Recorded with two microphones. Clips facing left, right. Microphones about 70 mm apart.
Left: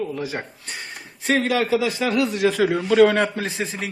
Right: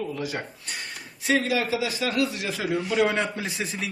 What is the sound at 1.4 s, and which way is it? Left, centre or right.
Speech, left.